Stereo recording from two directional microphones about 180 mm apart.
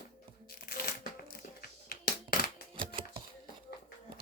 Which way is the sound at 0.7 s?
60° left (ahead or behind).